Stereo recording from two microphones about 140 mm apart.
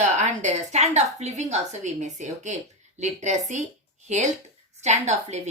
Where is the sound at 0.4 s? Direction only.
55° right (ahead or behind).